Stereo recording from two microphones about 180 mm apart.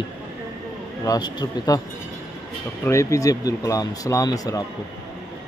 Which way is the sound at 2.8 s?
15° left (ahead or behind).